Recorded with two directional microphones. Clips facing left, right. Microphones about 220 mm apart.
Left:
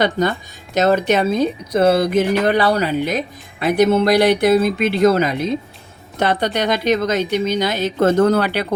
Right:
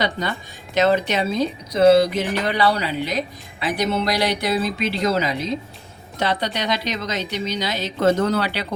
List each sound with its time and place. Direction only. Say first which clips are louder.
0.0 s speech: left 7 dB; 45° left (ahead or behind)